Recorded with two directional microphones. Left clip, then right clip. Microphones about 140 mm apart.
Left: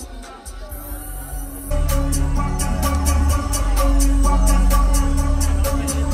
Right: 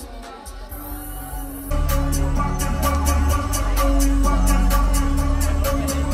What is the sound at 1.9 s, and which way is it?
Music, 25° left (ahead or behind).